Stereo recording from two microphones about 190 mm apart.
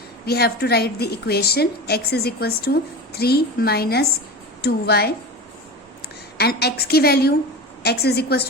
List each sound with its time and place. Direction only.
0.3 s a woman's voice: 55° left (ahead or behind)
6.3 s a woman's voice: 55° left (ahead or behind)